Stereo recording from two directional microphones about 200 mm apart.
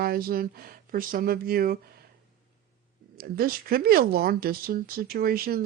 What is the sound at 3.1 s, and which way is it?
Speech, 50° right (ahead or behind).